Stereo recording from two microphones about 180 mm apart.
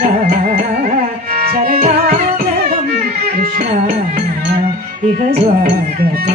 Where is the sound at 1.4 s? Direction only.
55° right (ahead or behind).